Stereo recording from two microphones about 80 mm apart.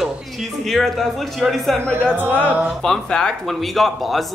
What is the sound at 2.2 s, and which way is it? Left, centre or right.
Speech, right.